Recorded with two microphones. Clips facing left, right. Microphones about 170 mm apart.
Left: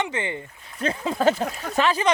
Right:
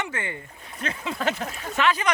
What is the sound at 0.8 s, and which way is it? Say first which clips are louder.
Speech: left 7 dB; 35° left (ahead or behind).